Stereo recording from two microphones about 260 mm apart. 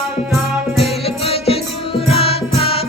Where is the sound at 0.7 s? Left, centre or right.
Centre.